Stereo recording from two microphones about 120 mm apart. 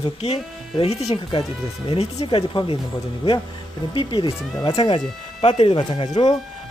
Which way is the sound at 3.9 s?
45° left (ahead or behind).